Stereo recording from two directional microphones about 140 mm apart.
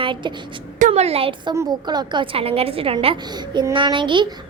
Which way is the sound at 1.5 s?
30° right (ahead or behind).